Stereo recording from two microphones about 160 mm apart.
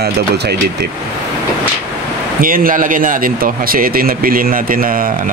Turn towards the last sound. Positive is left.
turn(degrees=-60)  # may be behind; listen again after turning